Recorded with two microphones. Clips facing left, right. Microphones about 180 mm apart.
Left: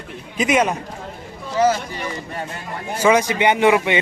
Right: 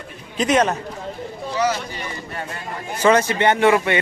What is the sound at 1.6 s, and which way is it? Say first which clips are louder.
Speech: left 4 dB; 50° left (ahead or behind).